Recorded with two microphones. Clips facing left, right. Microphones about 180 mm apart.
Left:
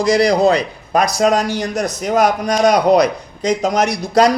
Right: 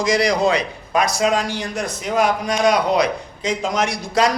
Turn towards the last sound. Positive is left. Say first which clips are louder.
# left 5 dB
turn(degrees=35)  # may be behind; listen again after turning